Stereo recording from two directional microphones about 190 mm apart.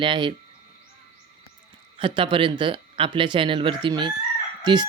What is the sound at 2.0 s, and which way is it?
Speech, 25° right (ahead or behind).